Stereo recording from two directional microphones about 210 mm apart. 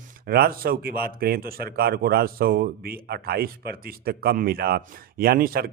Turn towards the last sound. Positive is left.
turn(degrees=-45)  # may be behind; listen again after turning